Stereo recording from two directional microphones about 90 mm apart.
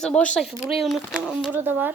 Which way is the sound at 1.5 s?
20° right (ahead or behind).